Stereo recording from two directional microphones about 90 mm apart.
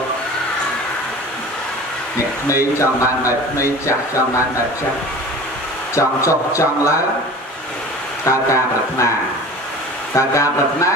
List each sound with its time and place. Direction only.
2.4 s a man's voice: 35° left (ahead or behind)
5.9 s a man's voice: 35° left (ahead or behind)
8.3 s a man's voice: 35° left (ahead or behind)
10.1 s a man's voice: 35° left (ahead or behind)